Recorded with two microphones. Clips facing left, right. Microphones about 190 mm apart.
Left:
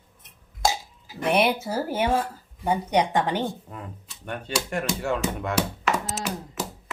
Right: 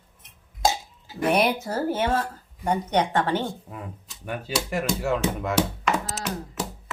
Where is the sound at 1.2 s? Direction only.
Centre (ahead or behind).